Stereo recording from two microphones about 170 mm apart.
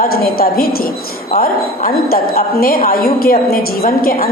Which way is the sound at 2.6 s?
60° left (ahead or behind).